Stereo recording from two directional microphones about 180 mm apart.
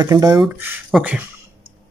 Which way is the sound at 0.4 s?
10° right (ahead or behind).